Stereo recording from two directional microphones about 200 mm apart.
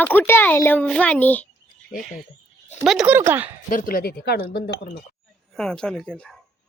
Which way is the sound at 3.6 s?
45° left (ahead or behind).